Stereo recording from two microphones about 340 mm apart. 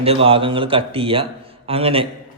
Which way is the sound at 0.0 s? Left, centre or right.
Centre.